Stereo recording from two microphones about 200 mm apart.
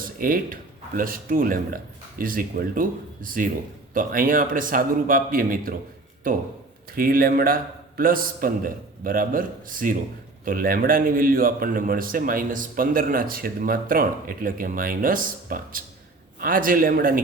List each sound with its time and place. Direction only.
0.0 s a man's voice: 45° right (ahead or behind)
6.9 s a man's voice: 45° right (ahead or behind)